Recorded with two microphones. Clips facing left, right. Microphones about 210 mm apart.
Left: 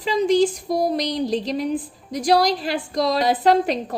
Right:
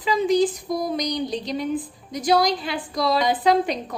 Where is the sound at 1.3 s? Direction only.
Centre (ahead or behind).